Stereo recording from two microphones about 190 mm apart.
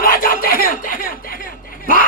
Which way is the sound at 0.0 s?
50° left (ahead or behind).